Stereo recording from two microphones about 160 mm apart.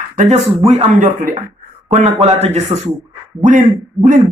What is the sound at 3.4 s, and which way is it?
Speech, 55° right (ahead or behind).